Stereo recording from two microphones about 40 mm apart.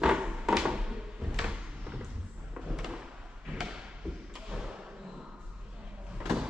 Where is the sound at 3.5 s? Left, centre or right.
Centre.